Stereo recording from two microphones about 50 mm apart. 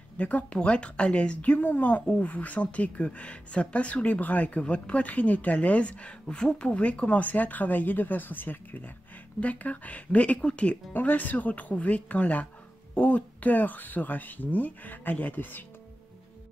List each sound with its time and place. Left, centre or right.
0.2 s speech: left
10.9 s speech: left